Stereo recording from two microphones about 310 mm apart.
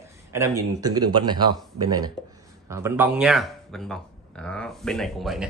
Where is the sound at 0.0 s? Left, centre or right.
Centre.